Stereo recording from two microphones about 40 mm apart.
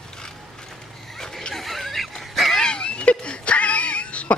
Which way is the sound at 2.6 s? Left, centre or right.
Left.